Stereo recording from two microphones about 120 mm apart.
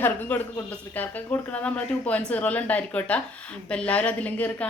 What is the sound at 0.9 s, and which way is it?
A woman's voice, 15° left (ahead or behind).